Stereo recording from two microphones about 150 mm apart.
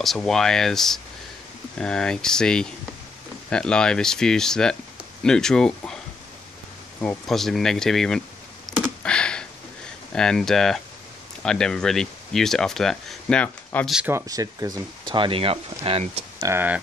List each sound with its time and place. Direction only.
0.0 s speech: centre (ahead or behind)
7.0 s speech: 5° left (ahead or behind)
8.7 s a sound: centre (ahead or behind)
10.1 s speech: 5° left (ahead or behind)
14.0 s speech: 20° right (ahead or behind); by 16.3 s 40° right (ahead or behind)
16.3 s speech: 20° right (ahead or behind)